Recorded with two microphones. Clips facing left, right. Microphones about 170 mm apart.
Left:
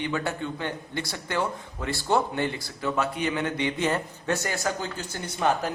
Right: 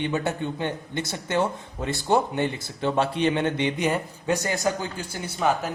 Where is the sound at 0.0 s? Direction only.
20° right (ahead or behind).